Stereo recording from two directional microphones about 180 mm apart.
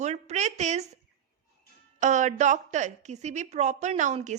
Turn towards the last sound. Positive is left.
turn(degrees=-40)  # may be behind; listen again after turning